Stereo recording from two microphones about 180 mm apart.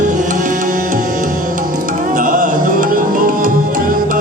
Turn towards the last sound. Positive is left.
turn(degrees=-50)  # may be behind; listen again after turning